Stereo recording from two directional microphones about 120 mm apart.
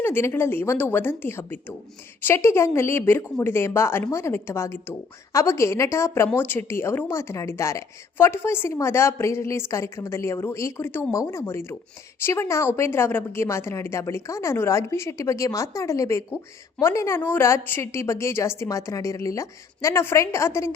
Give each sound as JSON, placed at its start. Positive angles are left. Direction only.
{"t": 0.0, "sound": "speech", "side_deg": 20}